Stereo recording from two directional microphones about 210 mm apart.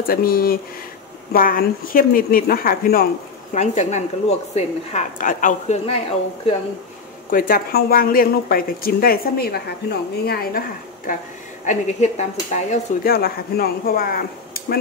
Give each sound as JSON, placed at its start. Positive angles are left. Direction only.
{"t": 0.0, "sound": "speech", "side_deg": 45}
{"t": 7.2, "sound": "speech", "side_deg": 40}
{"t": 11.6, "sound": "speech", "side_deg": 35}
{"t": 13.1, "sound": "speech", "side_deg": 45}